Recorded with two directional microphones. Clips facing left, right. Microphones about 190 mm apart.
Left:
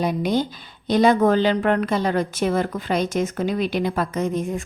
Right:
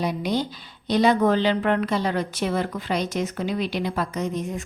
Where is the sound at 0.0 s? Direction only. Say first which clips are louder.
Left 3 dB; 50° left (ahead or behind).